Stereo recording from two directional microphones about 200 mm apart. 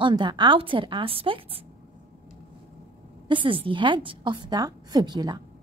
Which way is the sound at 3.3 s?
25° right (ahead or behind).